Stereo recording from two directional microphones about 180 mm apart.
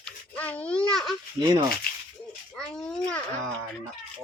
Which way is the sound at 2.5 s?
5° left (ahead or behind).